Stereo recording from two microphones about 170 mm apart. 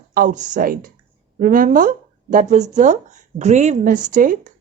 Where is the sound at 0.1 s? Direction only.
50° right (ahead or behind).